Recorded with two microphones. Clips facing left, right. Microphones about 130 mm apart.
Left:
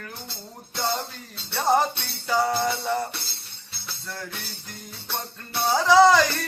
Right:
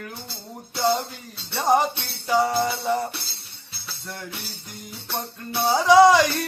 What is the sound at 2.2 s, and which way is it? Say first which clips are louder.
Music: right 2 dB; 10° right (ahead or behind).